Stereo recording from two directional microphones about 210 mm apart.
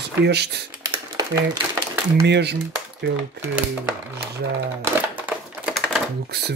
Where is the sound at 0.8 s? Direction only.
15° right (ahead or behind).